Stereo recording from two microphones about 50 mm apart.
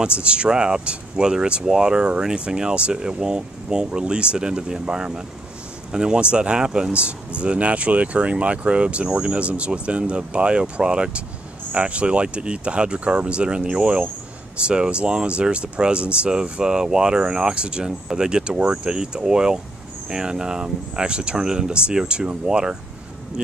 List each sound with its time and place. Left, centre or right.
0.0 s speech: centre